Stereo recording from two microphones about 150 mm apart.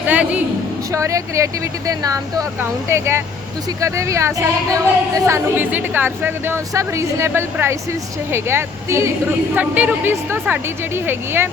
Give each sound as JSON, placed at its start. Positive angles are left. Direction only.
{"t": 0.1, "sound": "a woman's voice", "side_deg": -10}